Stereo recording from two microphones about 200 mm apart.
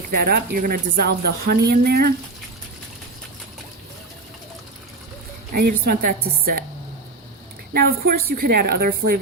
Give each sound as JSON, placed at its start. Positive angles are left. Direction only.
{"t": 0.2, "sound": "a woman's voice", "side_deg": -50}
{"t": 5.5, "sound": "a woman's voice", "side_deg": -50}
{"t": 7.7, "sound": "a woman's voice", "side_deg": -50}